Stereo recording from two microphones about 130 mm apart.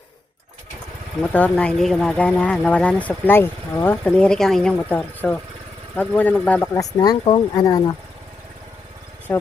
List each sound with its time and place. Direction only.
1.2 s speech: 10° left (ahead or behind)
6.7 s speech: 30° left (ahead or behind)
9.3 s speech: 15° left (ahead or behind)